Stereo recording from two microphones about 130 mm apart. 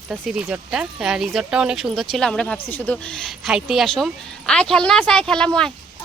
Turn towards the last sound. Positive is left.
turn(degrees=5)  # may be behind; listen again after turning